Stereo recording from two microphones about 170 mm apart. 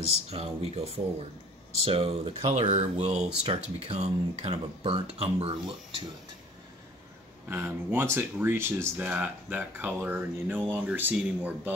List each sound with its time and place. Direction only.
0.3 s speech: 35° right (ahead or behind)
7.4 s speech: 10° right (ahead or behind)